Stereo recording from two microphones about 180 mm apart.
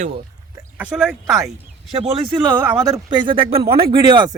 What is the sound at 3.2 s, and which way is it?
Speech, 30° right (ahead or behind).